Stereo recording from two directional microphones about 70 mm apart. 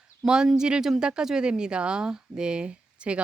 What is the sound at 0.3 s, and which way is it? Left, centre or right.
Speech, centre.